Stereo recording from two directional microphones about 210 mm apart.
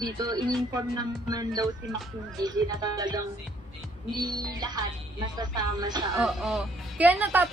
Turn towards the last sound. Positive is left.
turn(degrees=-10)  # may be behind; listen again after turning